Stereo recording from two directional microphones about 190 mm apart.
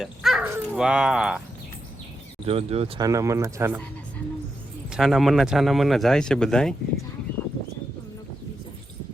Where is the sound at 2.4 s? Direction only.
30° right (ahead or behind).